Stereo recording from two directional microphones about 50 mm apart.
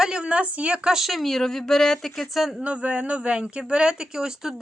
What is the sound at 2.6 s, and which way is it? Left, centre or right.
Speech, right.